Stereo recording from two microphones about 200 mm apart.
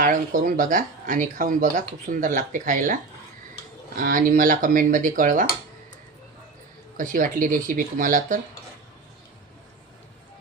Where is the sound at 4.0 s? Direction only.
45° right (ahead or behind).